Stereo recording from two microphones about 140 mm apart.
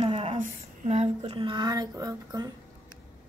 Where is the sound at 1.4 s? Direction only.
35° right (ahead or behind).